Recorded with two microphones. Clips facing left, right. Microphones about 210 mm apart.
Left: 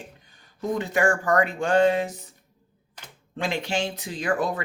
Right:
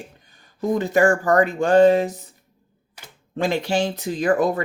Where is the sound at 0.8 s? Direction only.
40° right (ahead or behind).